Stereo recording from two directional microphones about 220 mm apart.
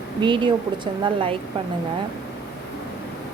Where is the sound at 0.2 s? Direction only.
20° right (ahead or behind).